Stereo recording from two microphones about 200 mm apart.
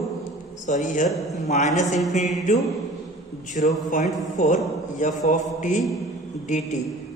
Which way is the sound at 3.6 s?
35° left (ahead or behind).